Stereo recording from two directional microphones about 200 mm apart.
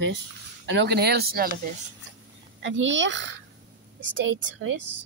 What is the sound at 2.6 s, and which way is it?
Speech, 65° right (ahead or behind).